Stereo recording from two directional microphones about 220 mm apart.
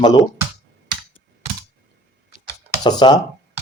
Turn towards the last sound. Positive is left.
turn(degrees=20)  # may be behind; listen again after turning